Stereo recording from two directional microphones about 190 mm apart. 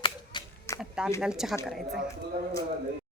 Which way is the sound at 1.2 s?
Centre (ahead or behind).